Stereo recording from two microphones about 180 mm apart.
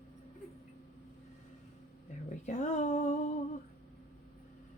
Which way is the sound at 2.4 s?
40° left (ahead or behind).